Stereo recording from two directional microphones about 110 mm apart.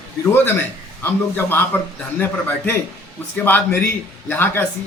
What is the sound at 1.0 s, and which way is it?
A man's voice, 20° left (ahead or behind).